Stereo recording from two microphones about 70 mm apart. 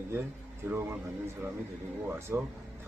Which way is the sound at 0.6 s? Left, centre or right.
Right.